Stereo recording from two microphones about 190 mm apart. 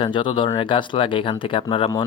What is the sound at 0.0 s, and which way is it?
Speech, 25° left (ahead or behind).